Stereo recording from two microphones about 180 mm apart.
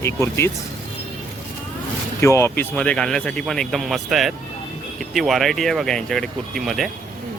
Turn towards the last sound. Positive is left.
turn(degrees=0)  # may be behind; listen again after turning